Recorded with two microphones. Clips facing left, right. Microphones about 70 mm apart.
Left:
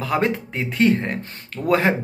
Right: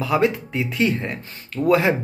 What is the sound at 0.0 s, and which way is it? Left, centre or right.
Speech, left.